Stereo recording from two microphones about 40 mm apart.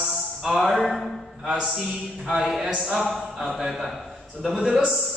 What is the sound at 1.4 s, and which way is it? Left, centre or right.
Mantra, right.